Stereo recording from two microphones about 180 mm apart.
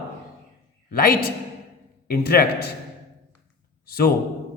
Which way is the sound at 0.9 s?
55° left (ahead or behind).